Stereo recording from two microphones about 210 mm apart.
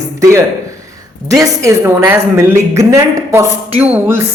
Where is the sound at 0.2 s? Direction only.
15° right (ahead or behind).